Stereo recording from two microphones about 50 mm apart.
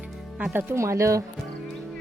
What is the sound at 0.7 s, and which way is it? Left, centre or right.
Speech, right.